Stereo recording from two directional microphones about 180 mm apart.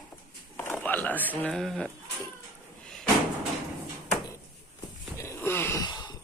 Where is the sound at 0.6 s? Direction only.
10° left (ahead or behind).